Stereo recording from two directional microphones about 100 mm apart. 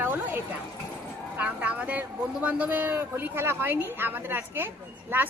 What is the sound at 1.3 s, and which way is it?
Speech, 15° right (ahead or behind).